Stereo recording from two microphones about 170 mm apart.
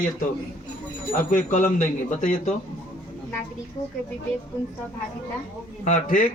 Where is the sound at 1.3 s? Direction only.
45° left (ahead or behind).